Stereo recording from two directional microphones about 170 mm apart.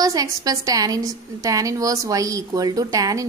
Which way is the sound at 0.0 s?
20° right (ahead or behind).